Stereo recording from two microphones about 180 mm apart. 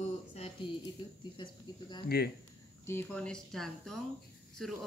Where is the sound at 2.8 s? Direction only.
10° left (ahead or behind).